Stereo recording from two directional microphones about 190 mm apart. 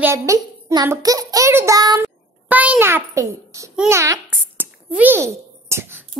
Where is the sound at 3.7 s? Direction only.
5° right (ahead or behind).